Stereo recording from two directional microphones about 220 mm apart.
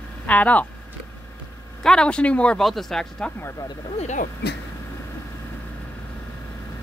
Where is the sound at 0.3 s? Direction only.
5° left (ahead or behind).